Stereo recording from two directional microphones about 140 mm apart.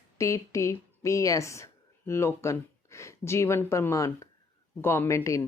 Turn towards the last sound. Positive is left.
turn(degrees=20)  # may be behind; listen again after turning